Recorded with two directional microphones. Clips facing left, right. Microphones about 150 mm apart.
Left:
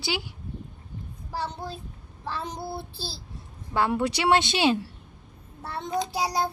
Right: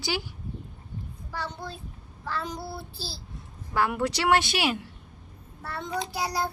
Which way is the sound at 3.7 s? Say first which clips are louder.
Left 2 dB; 20° left (ahead or behind).